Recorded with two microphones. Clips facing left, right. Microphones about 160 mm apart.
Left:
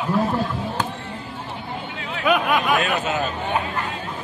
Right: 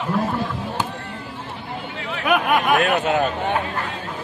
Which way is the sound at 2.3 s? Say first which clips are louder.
Right 1 dB; 55° right (ahead or behind).